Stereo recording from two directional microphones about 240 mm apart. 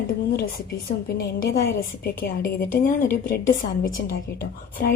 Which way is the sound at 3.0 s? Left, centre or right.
Left.